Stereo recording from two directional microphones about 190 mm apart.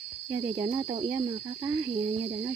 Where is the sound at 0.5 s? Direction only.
25° right (ahead or behind).